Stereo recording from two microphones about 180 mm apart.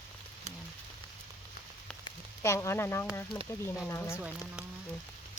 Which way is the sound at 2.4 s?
15° left (ahead or behind).